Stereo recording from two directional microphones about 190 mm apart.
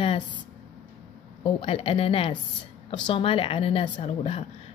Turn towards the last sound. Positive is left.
turn(degrees=30)  # may be behind; listen again after turning